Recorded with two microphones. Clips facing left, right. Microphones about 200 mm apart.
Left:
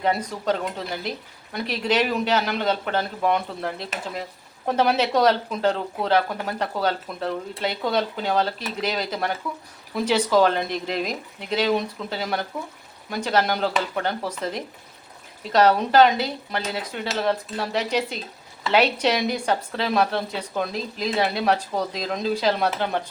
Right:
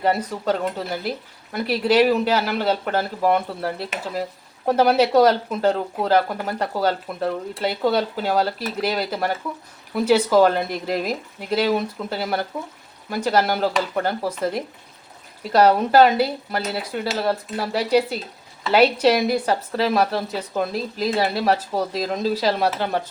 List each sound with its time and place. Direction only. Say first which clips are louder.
0.0 s a woman's voice: right 2 dB; 5° right (ahead or behind)
1.5 s a woman's voice: right 5 dB; 5° right (ahead or behind)